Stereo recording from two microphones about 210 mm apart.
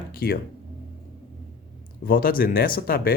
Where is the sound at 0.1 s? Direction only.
45° left (ahead or behind).